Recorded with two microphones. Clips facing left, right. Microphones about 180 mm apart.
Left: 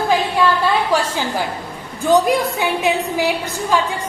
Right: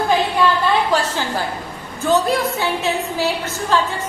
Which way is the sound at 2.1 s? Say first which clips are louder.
Left 2 dB; 15° left (ahead or behind).